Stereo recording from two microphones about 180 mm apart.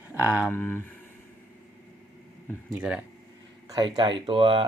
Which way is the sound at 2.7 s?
5° right (ahead or behind).